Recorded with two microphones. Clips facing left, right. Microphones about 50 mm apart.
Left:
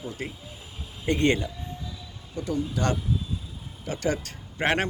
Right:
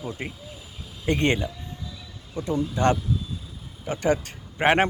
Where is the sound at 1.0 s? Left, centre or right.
Right.